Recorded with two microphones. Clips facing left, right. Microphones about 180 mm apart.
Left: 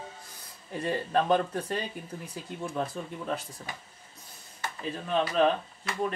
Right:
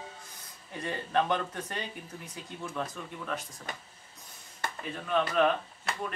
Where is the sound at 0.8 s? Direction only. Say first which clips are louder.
Left 2 dB; 35° left (ahead or behind).